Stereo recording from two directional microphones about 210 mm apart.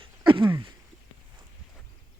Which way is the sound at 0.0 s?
25° right (ahead or behind).